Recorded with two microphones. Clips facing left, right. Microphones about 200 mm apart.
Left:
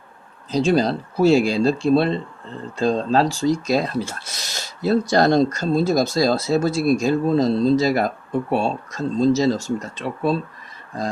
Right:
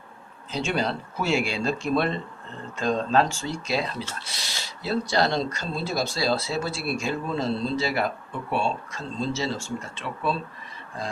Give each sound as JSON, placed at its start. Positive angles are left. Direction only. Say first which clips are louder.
{"t": 0.5, "sound": "speech", "louder": "left 9 dB", "side_deg": 35}